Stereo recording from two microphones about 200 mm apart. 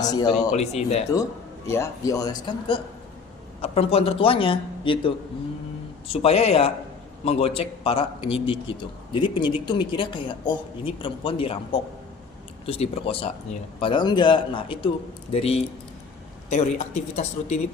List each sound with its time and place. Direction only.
0.0 s a man's voice: 20° left (ahead or behind)
0.5 s speech: 35° left (ahead or behind)
1.1 s a man's voice: 15° left (ahead or behind); by 17.6 s 35° left (ahead or behind)